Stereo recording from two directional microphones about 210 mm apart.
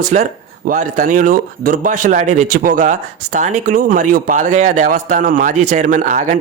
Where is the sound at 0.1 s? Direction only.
35° right (ahead or behind).